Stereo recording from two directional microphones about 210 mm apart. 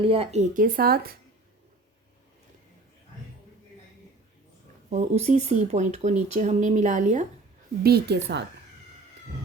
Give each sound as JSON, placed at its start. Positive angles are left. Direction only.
{"t": 0.0, "sound": "speech", "side_deg": -25}
{"t": 4.9, "sound": "speech", "side_deg": -35}
{"t": 7.9, "sound": "a woman's voice", "side_deg": -50}